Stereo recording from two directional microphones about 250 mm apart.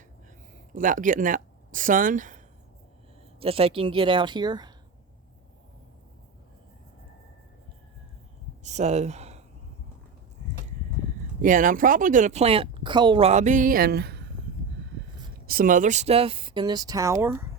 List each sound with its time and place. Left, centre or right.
0.7 s speech: right
3.4 s speech: right
8.6 s speech: right
11.4 s speech: right
15.4 s speech: right; by 17.4 s centre